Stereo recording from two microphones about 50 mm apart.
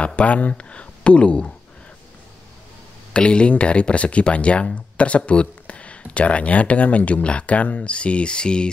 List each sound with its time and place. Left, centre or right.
0.0 s speech: left
3.1 s speech: left